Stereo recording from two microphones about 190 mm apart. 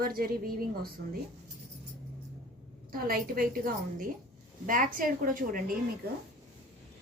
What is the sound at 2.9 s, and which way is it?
Speech, 50° right (ahead or behind).